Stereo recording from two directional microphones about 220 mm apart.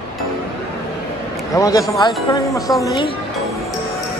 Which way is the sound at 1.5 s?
15° left (ahead or behind).